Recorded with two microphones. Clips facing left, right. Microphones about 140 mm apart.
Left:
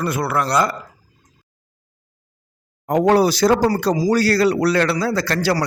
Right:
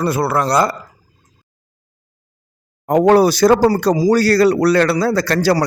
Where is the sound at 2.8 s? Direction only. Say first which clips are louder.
Right 4 dB; 45° right (ahead or behind).